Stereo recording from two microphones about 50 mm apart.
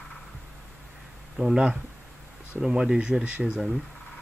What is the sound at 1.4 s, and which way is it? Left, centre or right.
Speech, centre.